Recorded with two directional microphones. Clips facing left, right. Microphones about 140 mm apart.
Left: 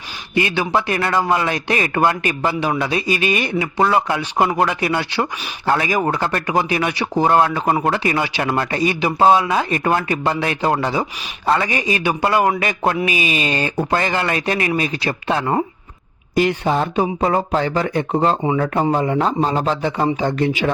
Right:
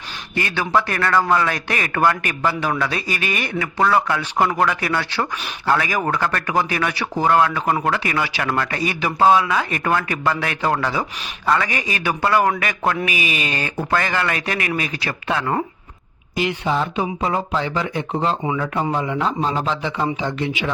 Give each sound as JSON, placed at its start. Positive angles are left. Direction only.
{"t": 0.3, "sound": "speech", "side_deg": 20}
{"t": 16.3, "sound": "speech", "side_deg": 45}